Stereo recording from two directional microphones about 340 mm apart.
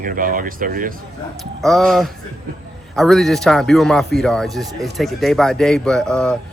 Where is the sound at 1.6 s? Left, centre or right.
Centre.